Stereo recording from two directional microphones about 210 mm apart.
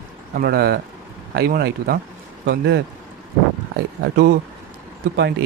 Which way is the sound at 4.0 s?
50° right (ahead or behind).